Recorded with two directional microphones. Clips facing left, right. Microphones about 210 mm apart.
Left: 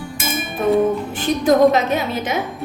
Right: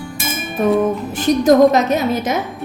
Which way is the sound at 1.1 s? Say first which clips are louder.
Right 4 dB; 45° right (ahead or behind).